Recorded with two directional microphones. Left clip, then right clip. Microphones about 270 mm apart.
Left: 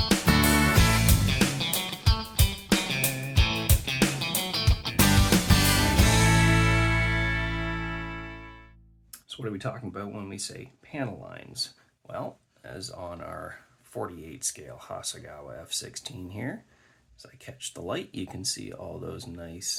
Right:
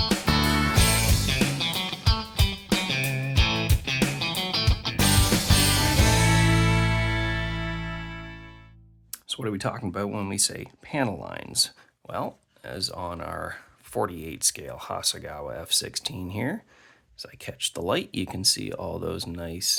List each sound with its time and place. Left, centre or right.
0.0 s music: centre
9.1 s speech: right